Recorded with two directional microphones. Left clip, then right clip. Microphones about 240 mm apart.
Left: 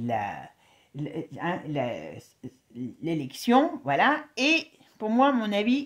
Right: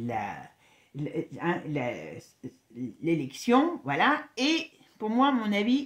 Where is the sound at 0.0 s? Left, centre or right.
Left.